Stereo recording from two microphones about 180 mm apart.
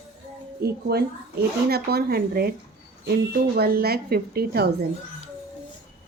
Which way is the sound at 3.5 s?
60° right (ahead or behind).